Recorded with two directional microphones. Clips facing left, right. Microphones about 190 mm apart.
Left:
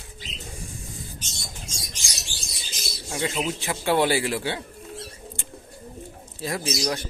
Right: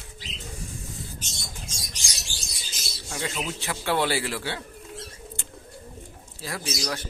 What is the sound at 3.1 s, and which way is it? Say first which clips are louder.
A man's voice: left 4 dB; 20° left (ahead or behind).